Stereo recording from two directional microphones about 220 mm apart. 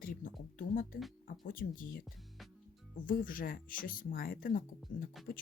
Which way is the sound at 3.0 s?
40° left (ahead or behind).